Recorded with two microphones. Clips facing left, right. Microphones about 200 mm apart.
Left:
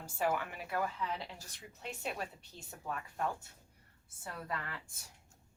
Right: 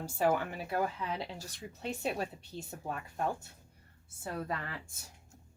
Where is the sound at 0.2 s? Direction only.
30° right (ahead or behind).